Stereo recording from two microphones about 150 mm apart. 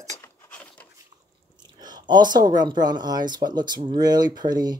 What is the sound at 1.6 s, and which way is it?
Speech, 25° right (ahead or behind).